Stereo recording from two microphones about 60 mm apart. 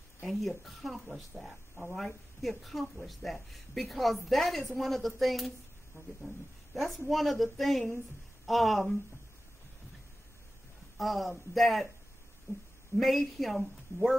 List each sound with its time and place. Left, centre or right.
0.2 s a woman's voice: centre
11.0 s a woman's voice: centre
12.5 s speech: left
12.9 s a woman's voice: centre